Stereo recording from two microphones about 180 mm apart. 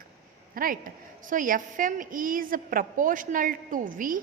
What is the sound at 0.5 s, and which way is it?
A woman's voice, 50° right (ahead or behind).